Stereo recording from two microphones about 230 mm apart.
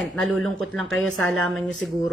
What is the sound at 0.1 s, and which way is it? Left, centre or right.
A woman's voice, centre.